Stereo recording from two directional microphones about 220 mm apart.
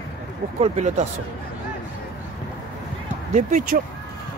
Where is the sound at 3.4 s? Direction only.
35° right (ahead or behind).